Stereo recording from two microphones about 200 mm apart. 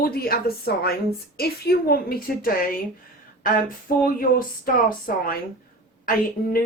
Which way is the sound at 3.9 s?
45° left (ahead or behind).